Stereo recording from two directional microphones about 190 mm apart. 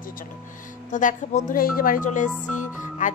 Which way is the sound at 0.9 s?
40° left (ahead or behind).